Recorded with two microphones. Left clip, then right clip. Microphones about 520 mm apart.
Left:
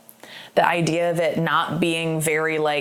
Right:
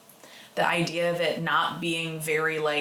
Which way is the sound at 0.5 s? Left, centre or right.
Left.